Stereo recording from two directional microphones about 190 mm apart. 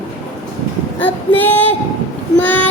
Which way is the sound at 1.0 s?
10° left (ahead or behind).